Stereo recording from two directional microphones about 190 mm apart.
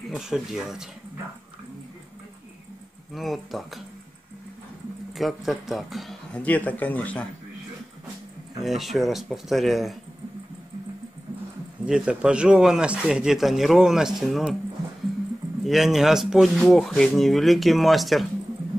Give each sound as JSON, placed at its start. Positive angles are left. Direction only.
{"t": 0.1, "sound": "speech", "side_deg": 0}
{"t": 3.1, "sound": "speech", "side_deg": 0}
{"t": 5.1, "sound": "speech", "side_deg": 0}
{"t": 8.6, "sound": "speech", "side_deg": 0}
{"t": 11.8, "sound": "speech", "side_deg": -5}
{"t": 15.6, "sound": "speech", "side_deg": 0}